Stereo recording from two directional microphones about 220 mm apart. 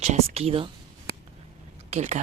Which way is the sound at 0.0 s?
30° right (ahead or behind).